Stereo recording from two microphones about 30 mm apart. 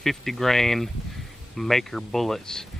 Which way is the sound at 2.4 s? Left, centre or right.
Centre.